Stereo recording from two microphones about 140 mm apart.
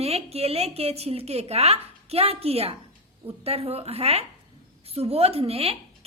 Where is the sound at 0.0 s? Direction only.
45° right (ahead or behind).